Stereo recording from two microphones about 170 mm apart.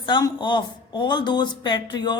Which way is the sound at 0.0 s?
25° left (ahead or behind).